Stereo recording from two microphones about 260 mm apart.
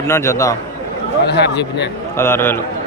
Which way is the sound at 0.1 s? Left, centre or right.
Centre.